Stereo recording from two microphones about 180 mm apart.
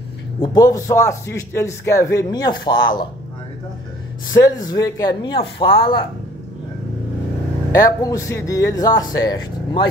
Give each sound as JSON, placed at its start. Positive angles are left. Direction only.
{"t": 0.4, "sound": "a man's voice", "side_deg": 20}
{"t": 4.3, "sound": "a man's voice", "side_deg": 20}
{"t": 7.7, "sound": "a man's voice", "side_deg": 20}